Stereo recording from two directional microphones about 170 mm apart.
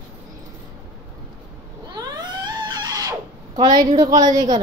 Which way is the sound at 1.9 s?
25° right (ahead or behind).